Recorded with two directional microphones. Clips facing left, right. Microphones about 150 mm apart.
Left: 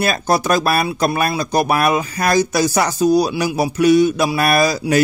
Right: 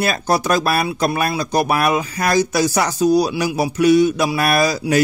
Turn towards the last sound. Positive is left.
turn(degrees=40)  # may be behind; listen again after turning